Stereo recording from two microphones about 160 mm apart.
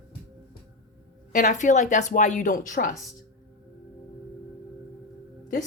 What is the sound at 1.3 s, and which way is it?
A woman's voice, 50° left (ahead or behind).